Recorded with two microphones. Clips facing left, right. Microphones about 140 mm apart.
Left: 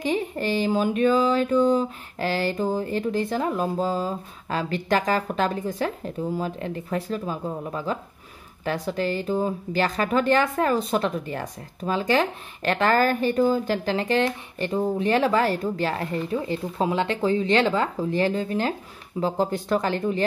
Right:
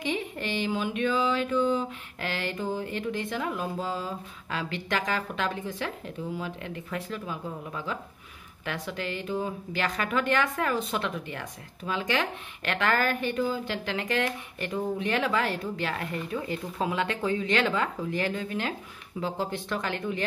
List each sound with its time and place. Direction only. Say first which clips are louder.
0.0 s speech: left 6 dB; 40° left (ahead or behind)